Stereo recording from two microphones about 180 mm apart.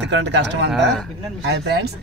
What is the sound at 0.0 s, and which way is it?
Speech, 75° right (ahead or behind).